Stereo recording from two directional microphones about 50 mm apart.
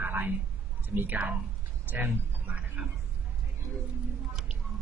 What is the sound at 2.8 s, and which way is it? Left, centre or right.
Speech, right.